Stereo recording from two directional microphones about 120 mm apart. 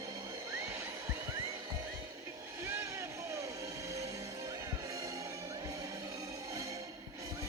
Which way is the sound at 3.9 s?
25° right (ahead or behind).